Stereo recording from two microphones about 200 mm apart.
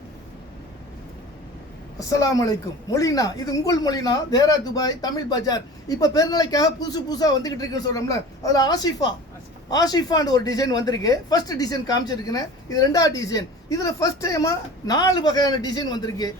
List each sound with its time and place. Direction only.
2.0 s a woman's voice: 15° left (ahead or behind)